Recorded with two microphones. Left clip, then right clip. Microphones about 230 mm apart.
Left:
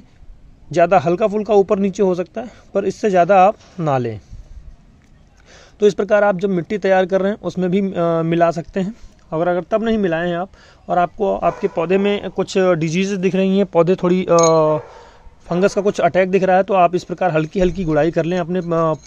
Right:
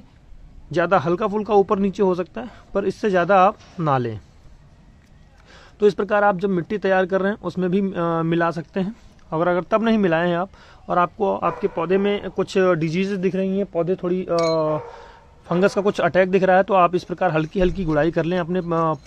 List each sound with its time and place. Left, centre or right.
0.7 s speech: centre
5.5 s speech: centre
13.4 s speech: left
15.0 s speech: centre